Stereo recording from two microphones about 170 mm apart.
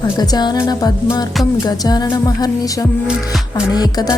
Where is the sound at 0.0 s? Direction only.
25° left (ahead or behind).